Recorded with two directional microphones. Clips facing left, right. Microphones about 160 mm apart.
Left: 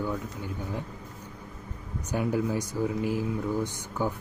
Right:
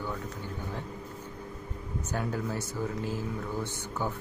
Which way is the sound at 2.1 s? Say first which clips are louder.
Left 6 dB; 15° left (ahead or behind).